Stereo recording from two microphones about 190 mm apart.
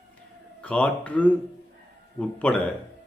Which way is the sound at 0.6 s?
5° left (ahead or behind).